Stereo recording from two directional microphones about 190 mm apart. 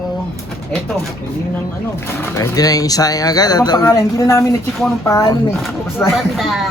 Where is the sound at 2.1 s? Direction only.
10° left (ahead or behind).